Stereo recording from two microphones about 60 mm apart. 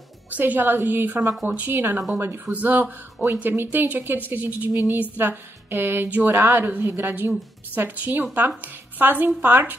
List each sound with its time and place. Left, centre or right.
0.3 s speech: right
2.5 s a woman's voice: right